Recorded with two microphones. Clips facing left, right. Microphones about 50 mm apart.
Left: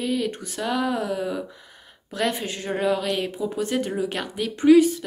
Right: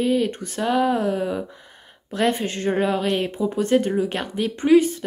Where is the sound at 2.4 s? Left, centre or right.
Right.